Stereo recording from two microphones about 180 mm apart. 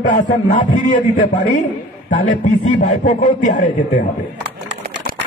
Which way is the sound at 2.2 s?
45° left (ahead or behind).